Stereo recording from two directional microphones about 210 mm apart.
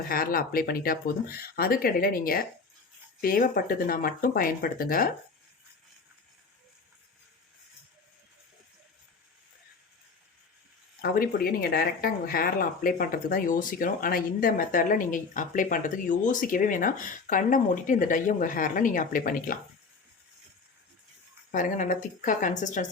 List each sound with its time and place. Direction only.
0.1 s speech: 45° left (ahead or behind)
11.0 s speech: 45° left (ahead or behind)
21.5 s speech: 40° left (ahead or behind)